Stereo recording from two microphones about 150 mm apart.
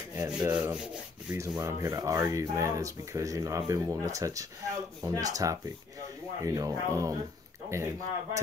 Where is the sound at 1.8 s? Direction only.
20° right (ahead or behind).